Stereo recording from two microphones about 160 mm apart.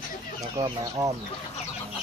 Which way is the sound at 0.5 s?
25° right (ahead or behind).